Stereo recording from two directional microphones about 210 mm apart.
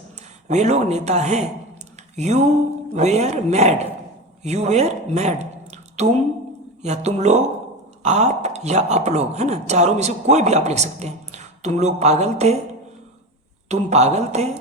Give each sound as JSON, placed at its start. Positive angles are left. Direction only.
{"t": 0.4, "sound": "speech", "side_deg": -35}
{"t": 13.7, "sound": "speech", "side_deg": -30}